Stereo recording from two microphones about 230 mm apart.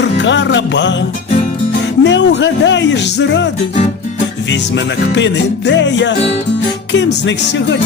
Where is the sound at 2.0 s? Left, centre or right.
Left.